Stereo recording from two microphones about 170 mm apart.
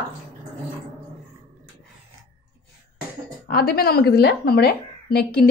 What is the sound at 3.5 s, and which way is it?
A woman's voice, 65° left (ahead or behind).